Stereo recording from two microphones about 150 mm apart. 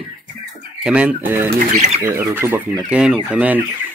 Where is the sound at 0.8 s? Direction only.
10° right (ahead or behind).